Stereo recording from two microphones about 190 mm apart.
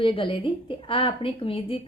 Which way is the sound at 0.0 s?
25° left (ahead or behind).